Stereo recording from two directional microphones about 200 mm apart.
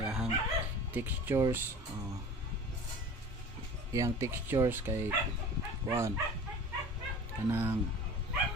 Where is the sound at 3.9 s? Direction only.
15° right (ahead or behind).